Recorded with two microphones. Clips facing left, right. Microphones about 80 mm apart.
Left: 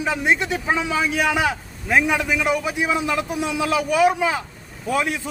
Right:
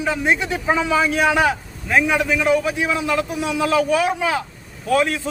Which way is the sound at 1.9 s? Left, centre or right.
Centre.